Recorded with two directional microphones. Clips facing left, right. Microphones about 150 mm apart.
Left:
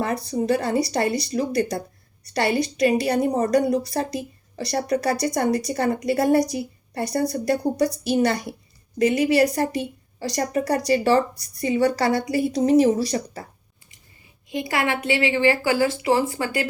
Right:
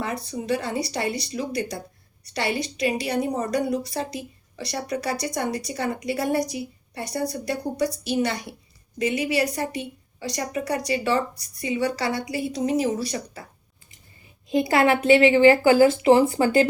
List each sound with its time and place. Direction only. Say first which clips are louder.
0.0 s a woman's voice: left 6 dB; 40° left (ahead or behind)
14.5 s a woman's voice: right 5 dB; 25° right (ahead or behind)